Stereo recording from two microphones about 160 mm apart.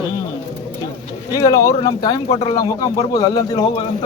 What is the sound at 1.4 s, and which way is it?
Speech, 20° left (ahead or behind).